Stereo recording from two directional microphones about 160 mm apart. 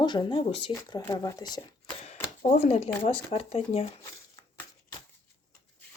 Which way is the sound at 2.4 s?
45° left (ahead or behind).